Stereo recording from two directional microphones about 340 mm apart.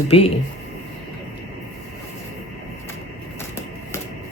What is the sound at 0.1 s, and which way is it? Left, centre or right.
Speech, centre.